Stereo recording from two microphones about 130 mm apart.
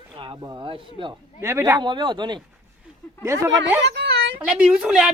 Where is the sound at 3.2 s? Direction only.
20° right (ahead or behind).